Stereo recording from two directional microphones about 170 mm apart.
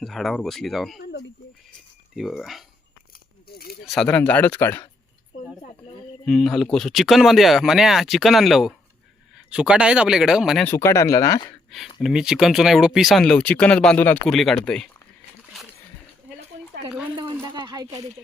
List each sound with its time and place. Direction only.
0.0 s speech: centre (ahead or behind)
2.1 s speech: centre (ahead or behind)
3.8 s speech: 5° left (ahead or behind)
6.2 s speech: centre (ahead or behind)
10.6 s speech: 15° left (ahead or behind)
11.9 s speech: centre (ahead or behind)
17.4 s a sound: 25° right (ahead or behind)